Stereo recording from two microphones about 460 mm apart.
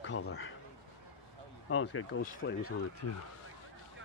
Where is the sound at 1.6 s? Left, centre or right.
Left.